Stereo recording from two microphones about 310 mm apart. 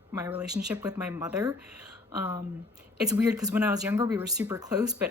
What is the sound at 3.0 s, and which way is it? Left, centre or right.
Speech, centre.